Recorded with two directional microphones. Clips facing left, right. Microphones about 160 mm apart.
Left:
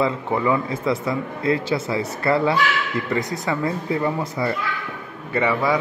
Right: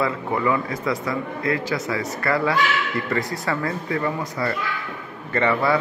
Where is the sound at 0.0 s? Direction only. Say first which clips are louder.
Left 2 dB; 20° left (ahead or behind).